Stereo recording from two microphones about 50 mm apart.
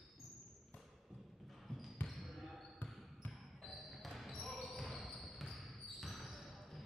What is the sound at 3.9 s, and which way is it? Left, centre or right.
Basketball bounce, centre.